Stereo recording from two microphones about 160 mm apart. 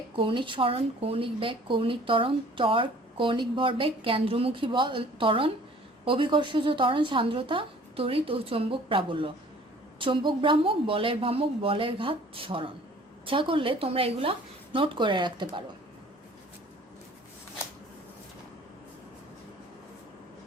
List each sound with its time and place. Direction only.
0.2 s speech: 30° right (ahead or behind)